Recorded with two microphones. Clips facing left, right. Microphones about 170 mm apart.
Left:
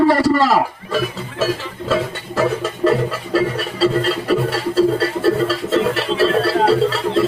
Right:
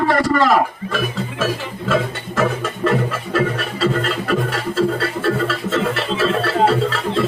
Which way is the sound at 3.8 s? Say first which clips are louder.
Left 3 dB; 35° left (ahead or behind).